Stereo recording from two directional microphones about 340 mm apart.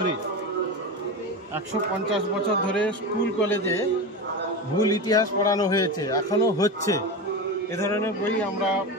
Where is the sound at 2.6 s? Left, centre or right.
Centre.